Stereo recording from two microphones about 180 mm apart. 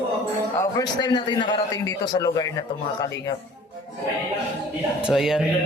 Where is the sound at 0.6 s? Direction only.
20° left (ahead or behind).